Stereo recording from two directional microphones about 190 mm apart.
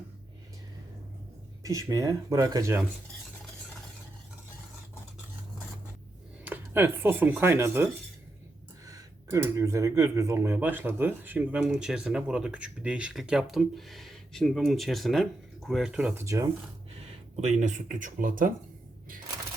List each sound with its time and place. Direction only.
1.6 s speech: 20° right (ahead or behind)
6.4 s speech: 10° right (ahead or behind)
8.9 s speech: 15° right (ahead or behind)
16.2 s speech: 15° right (ahead or behind)
17.0 s speech: 40° right (ahead or behind)